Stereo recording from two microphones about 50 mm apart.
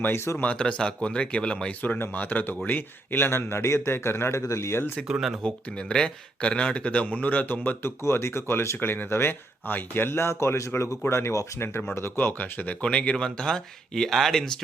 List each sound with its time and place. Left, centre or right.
0.1 s a man's voice: left
0.5 s speech: centre
1.8 s a man's voice: left
5.4 s speech: centre; by 7.8 s left
7.8 s speech: left
8.8 s speech: left
11.1 s speech: left
11.9 s a man's voice: left
12.2 s speech: left
12.8 s speech: left